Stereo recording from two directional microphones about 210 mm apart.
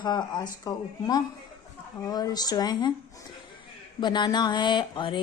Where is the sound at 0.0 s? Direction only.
20° left (ahead or behind).